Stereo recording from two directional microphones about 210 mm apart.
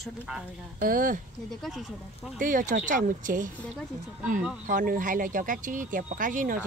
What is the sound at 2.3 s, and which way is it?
Speech, 40° right (ahead or behind).